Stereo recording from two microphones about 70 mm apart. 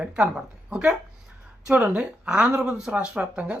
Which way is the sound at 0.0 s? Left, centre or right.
Centre.